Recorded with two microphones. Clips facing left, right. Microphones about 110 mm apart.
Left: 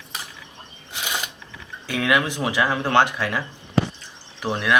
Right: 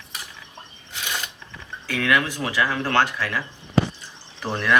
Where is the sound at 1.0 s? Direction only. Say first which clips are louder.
Left 2 dB; 15° left (ahead or behind).